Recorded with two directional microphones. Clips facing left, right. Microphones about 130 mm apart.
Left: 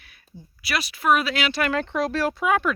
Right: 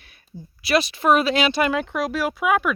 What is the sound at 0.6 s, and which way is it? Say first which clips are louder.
Speech: right 7 dB; 25° right (ahead or behind).